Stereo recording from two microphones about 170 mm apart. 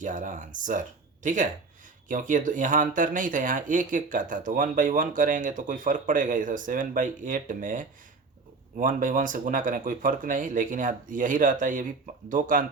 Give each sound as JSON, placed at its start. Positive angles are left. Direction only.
{"t": 0.0, "sound": "speech", "side_deg": -50}